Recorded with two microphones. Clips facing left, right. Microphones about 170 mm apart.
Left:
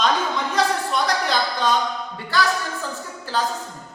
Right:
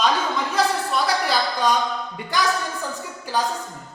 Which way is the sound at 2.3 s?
15° right (ahead or behind).